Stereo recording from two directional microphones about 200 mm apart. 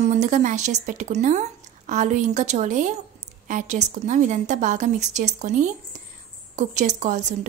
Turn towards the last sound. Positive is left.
turn(degrees=-35)  # may be behind; listen again after turning